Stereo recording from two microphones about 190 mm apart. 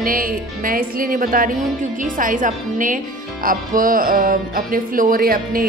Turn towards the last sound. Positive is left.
turn(degrees=-50)  # may be behind; listen again after turning